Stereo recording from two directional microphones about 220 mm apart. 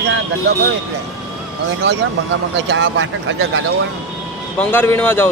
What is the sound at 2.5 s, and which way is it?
Speech, 55° right (ahead or behind).